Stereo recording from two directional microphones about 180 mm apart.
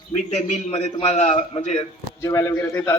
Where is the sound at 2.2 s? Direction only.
15° left (ahead or behind).